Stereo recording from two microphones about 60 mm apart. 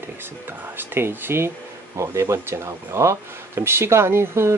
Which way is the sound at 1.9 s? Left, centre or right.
Right.